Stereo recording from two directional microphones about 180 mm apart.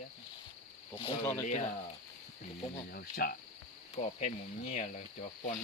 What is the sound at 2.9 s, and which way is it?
Speech, 55° left (ahead or behind).